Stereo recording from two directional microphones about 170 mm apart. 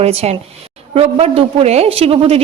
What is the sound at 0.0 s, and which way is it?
A woman's voice, 40° right (ahead or behind).